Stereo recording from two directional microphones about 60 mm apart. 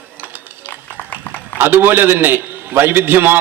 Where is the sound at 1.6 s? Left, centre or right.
Right.